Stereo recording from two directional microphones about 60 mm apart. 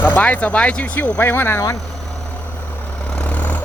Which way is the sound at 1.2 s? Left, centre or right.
Left.